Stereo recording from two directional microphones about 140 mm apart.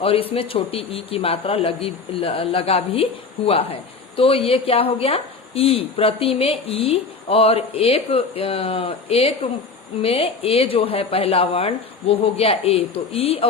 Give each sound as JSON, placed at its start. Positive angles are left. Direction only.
{"t": 0.0, "sound": "a woman's voice", "side_deg": 40}